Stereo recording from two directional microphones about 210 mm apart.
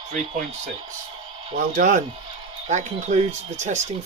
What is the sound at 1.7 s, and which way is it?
Speech, 35° right (ahead or behind).